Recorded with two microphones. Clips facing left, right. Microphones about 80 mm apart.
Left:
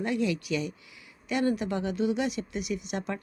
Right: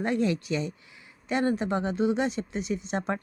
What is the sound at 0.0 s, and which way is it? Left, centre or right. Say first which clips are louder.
A woman's voice: right 2 dB; right.